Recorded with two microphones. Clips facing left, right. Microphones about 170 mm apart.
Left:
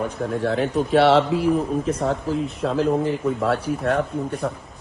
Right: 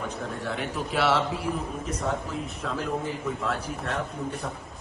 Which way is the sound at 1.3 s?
65° left (ahead or behind).